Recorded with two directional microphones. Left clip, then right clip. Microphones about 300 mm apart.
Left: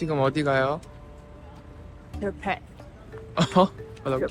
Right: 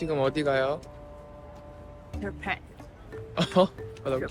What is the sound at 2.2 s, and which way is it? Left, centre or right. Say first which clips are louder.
Speech: left 4 dB; centre.